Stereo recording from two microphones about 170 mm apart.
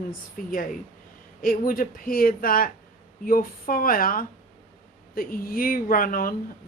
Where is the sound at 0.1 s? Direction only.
55° left (ahead or behind).